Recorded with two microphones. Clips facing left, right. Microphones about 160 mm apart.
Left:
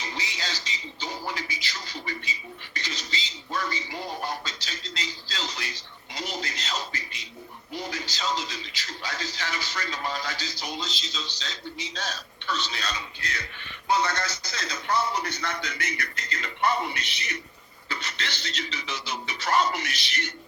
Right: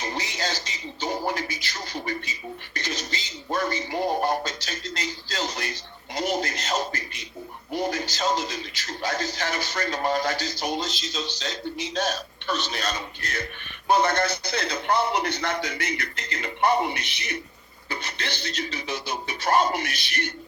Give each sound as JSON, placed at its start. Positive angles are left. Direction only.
{"t": 0.0, "sound": "speech", "side_deg": -50}
{"t": 15.4, "sound": "speech", "side_deg": -45}
{"t": 18.2, "sound": "speech", "side_deg": -50}